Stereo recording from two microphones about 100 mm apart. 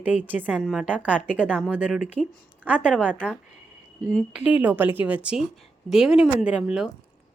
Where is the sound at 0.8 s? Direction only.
15° right (ahead or behind).